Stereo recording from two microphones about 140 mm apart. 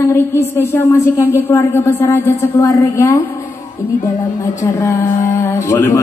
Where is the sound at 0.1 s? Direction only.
20° left (ahead or behind).